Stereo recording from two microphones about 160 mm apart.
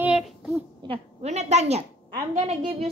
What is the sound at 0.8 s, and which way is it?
A woman's voice, 40° right (ahead or behind).